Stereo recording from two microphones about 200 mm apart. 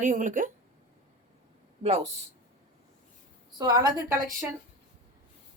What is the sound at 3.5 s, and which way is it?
Speech, 20° right (ahead or behind).